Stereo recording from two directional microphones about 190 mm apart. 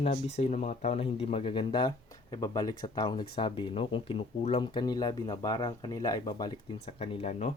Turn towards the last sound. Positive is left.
turn(degrees=35)  # may be behind; listen again after turning